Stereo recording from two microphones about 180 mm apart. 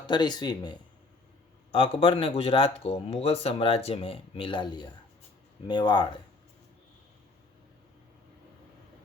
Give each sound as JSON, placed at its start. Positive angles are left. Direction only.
{"t": 0.1, "sound": "speech", "side_deg": 25}